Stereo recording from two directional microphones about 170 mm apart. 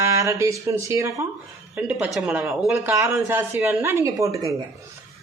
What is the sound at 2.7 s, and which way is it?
Speech, 15° right (ahead or behind).